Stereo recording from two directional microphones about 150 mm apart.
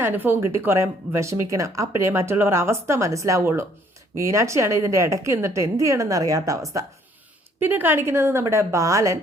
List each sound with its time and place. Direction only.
0.0 s a woman's voice: 15° right (ahead or behind)